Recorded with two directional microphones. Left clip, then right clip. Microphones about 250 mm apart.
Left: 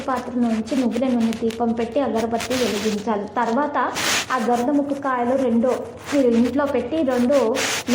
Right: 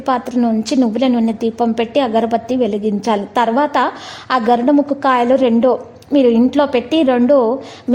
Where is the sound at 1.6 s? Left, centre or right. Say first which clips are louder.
Right 7 dB; right.